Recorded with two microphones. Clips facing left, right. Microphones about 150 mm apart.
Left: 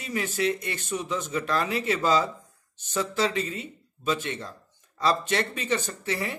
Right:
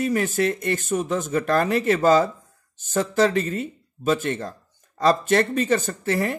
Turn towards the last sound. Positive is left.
turn(degrees=-45)  # may be behind; listen again after turning